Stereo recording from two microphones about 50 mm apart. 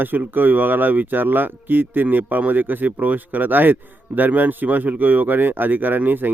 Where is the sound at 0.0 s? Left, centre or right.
Right.